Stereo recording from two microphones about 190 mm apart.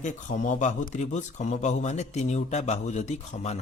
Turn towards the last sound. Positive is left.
turn(degrees=35)  # may be behind; listen again after turning